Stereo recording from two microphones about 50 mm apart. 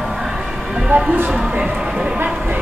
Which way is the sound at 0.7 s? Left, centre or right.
Right.